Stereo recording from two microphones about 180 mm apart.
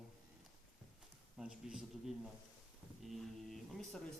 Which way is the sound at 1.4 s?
5° right (ahead or behind).